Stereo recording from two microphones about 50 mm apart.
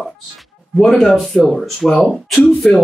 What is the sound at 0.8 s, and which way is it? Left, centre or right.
Speech, centre.